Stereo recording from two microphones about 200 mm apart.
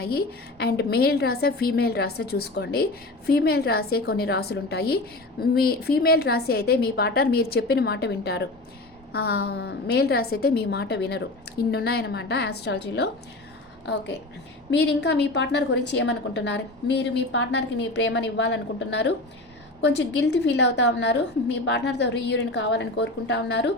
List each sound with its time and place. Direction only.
0.6 s a woman's voice: 55° left (ahead or behind)